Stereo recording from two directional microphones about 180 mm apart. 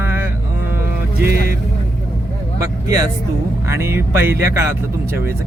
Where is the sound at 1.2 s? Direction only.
55° right (ahead or behind).